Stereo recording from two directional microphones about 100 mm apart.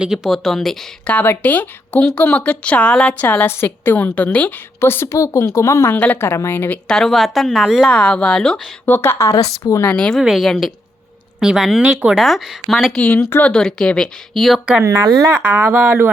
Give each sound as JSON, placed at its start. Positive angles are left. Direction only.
{"t": 0.0, "sound": "speech", "side_deg": -5}
{"t": 1.1, "sound": "speech", "side_deg": 15}
{"t": 4.8, "sound": "a woman's voice", "side_deg": 25}
{"t": 6.8, "sound": "speech", "side_deg": 5}
{"t": 7.9, "sound": "speech", "side_deg": 10}
{"t": 8.9, "sound": "a woman's voice", "side_deg": 25}
{"t": 9.8, "sound": "speech", "side_deg": 10}
{"t": 10.2, "sound": "a woman's voice", "side_deg": 0}
{"t": 13.0, "sound": "a woman's voice", "side_deg": 20}
{"t": 13.5, "sound": "speech", "side_deg": 5}
{"t": 14.8, "sound": "speech", "side_deg": -30}
{"t": 15.3, "sound": "speech", "side_deg": -20}